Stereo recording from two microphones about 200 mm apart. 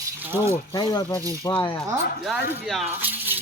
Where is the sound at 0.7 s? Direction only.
20° left (ahead or behind).